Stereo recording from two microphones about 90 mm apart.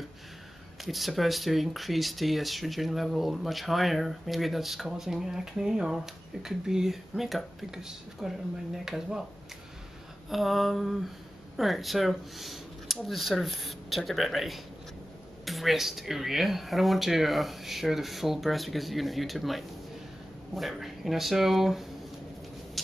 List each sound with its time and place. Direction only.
0.8 s speech: centre (ahead or behind)
10.3 s speech: centre (ahead or behind)